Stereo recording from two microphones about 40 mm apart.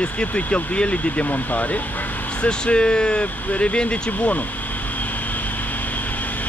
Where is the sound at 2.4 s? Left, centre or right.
Left.